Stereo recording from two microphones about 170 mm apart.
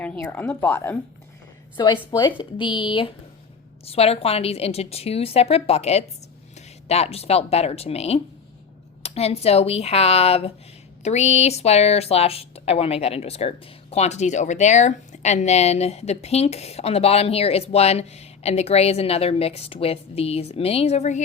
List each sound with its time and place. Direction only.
0.0 s speech: 10° left (ahead or behind)
1.7 s a woman's voice: 30° left (ahead or behind); by 21.2 s 45° left (ahead or behind)